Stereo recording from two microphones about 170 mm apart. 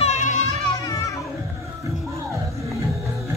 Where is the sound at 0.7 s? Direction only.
20° left (ahead or behind).